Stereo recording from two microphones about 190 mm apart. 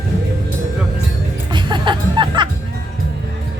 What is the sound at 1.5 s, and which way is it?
Music, 25° right (ahead or behind).